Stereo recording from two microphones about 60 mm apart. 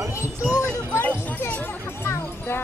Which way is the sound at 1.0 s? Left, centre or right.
Left.